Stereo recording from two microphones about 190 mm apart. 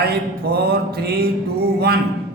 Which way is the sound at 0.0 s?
55° right (ahead or behind).